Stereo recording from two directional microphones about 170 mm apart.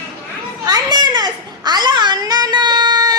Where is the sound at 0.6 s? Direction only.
25° right (ahead or behind).